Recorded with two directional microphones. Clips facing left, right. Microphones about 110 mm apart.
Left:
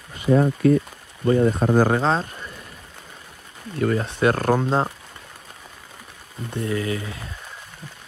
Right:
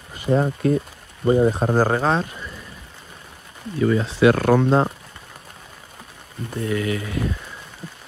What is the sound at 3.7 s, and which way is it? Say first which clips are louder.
Speech: right 3 dB; 55° left (ahead or behind).